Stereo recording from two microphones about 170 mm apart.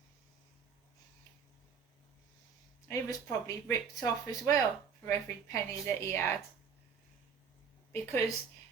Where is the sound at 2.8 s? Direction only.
20° left (ahead or behind).